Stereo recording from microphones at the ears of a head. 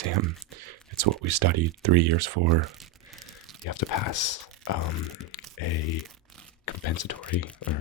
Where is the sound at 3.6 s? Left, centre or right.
Left.